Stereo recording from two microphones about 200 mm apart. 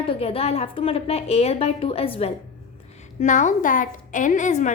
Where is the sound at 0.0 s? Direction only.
25° left (ahead or behind).